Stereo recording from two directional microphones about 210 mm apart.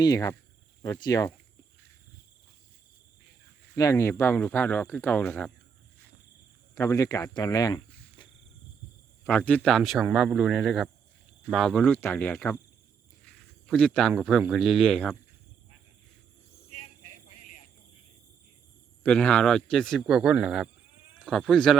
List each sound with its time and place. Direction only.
0.0 s speech: 15° left (ahead or behind)
3.8 s speech: 15° left (ahead or behind)
6.7 s speech: 15° left (ahead or behind)
9.2 s a man's voice: 10° left (ahead or behind)
16.6 s a sound: 35° left (ahead or behind)
19.0 s a man's voice: 5° left (ahead or behind)